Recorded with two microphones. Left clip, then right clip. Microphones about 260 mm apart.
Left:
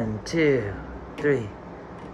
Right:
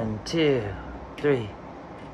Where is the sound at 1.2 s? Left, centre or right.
Centre.